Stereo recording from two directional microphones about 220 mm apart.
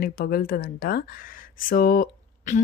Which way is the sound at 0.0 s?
40° left (ahead or behind).